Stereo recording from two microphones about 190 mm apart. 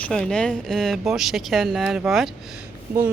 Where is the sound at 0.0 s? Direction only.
5° left (ahead or behind).